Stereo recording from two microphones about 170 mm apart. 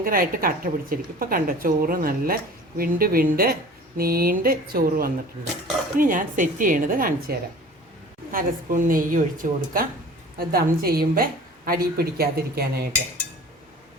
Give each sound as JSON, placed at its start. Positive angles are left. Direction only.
{"t": 0.0, "sound": "a woman's voice", "side_deg": -60}